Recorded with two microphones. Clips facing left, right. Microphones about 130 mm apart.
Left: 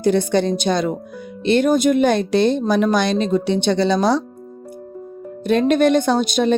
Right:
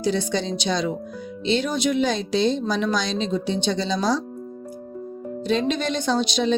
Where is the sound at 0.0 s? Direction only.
55° left (ahead or behind).